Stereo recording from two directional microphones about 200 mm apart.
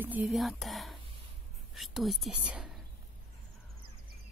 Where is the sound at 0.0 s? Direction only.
10° right (ahead or behind).